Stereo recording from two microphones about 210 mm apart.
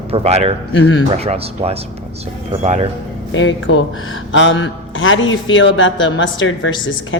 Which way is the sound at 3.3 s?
65° left (ahead or behind).